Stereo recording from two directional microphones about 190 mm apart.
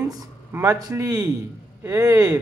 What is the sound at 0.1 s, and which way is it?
Speech, 15° right (ahead or behind).